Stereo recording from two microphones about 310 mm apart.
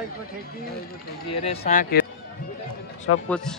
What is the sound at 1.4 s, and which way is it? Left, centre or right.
Speech, left.